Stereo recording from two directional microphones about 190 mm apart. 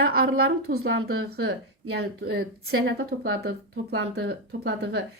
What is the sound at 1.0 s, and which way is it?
A woman's voice, 75° right (ahead or behind).